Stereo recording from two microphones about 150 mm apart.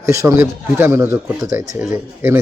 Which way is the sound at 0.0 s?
20° right (ahead or behind).